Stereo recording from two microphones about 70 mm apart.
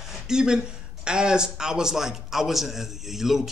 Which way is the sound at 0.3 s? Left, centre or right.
Centre.